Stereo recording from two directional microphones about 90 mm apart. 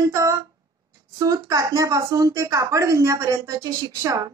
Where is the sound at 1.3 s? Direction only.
35° right (ahead or behind).